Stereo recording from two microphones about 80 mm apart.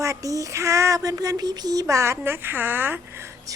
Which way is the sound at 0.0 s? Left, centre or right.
Right.